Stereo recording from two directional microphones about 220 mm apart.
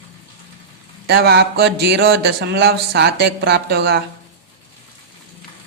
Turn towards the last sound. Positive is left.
turn(degrees=-50)  # may be behind; listen again after turning